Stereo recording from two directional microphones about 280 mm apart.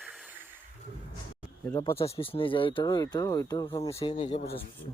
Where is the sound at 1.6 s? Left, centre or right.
Centre.